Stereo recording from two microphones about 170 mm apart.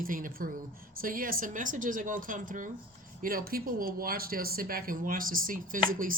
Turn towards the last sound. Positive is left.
turn(degrees=-55)  # may be behind; listen again after turning